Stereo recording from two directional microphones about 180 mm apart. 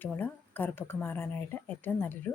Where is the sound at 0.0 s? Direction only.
10° left (ahead or behind).